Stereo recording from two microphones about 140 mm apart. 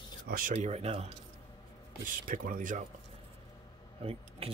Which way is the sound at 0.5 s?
50° right (ahead or behind).